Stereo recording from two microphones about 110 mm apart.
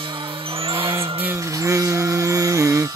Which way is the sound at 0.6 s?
50° right (ahead or behind).